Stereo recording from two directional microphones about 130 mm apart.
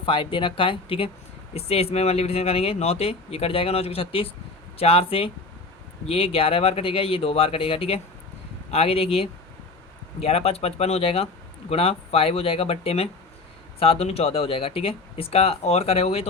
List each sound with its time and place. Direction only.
0.0 s speech: 40° left (ahead or behind)